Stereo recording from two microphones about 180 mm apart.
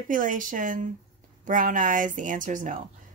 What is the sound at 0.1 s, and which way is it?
Speech, 45° right (ahead or behind).